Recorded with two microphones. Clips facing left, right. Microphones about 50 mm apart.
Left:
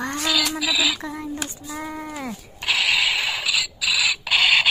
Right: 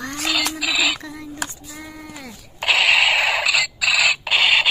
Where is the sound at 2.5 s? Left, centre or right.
Right.